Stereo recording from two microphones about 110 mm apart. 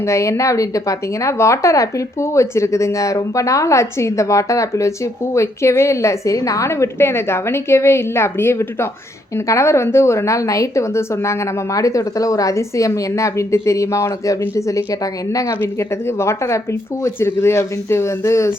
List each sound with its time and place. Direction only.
0.0 s a woman's voice: 25° left (ahead or behind)